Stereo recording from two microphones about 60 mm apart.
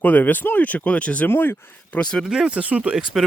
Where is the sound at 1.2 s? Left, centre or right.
Left.